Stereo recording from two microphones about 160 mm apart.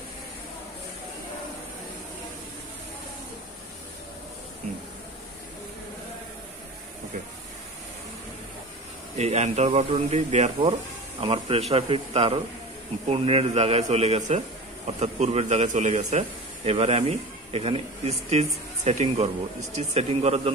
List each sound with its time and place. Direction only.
9.1 s speech: 45° right (ahead or behind)
10.6 s speech: 35° right (ahead or behind)